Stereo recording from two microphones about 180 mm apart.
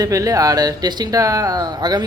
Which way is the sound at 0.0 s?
20° right (ahead or behind).